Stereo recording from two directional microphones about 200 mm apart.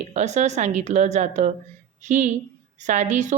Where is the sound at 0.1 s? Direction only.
35° right (ahead or behind).